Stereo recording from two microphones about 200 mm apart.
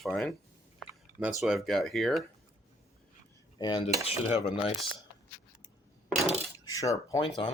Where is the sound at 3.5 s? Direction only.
20° left (ahead or behind).